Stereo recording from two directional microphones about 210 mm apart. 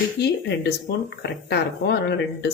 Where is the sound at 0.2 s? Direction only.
50° left (ahead or behind).